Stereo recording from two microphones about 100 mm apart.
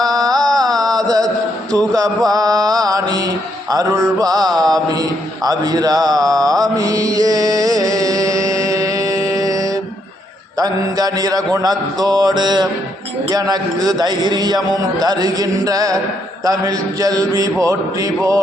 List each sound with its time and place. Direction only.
0.0 s mantra: 40° right (ahead or behind)
2.3 s a man's voice: 40° right (ahead or behind)
4.4 s mantra: 5° left (ahead or behind)
4.7 s mantra: 40° right (ahead or behind)
10.6 s a man's voice: 40° right (ahead or behind)